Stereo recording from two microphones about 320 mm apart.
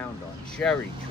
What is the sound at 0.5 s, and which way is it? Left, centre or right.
Speech, centre.